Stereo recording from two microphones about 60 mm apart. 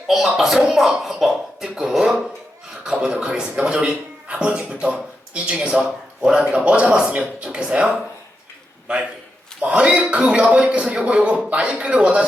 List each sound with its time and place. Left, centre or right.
0.1 s speech: centre
0.6 s a sound: centre
2.8 s a man's voice: centre
9.6 s a man's voice: centre